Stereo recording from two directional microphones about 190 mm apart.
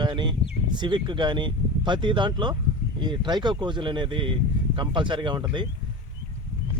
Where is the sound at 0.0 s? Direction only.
25° right (ahead or behind).